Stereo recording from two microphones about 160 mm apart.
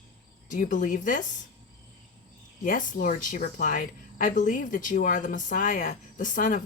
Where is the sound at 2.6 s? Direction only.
60° left (ahead or behind).